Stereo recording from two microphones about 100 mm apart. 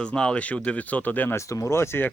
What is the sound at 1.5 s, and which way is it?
Speech, 30° left (ahead or behind).